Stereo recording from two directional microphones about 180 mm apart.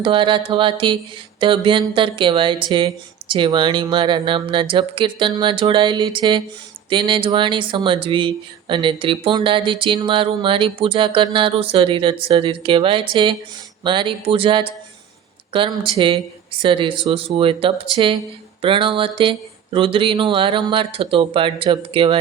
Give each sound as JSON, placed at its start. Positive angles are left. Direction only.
{"t": 0.0, "sound": "speech", "side_deg": -30}